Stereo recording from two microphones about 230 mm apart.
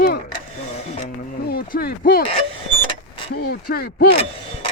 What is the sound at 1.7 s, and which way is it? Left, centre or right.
Speech, left.